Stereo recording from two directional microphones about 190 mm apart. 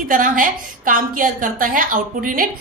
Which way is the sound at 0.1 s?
45° right (ahead or behind).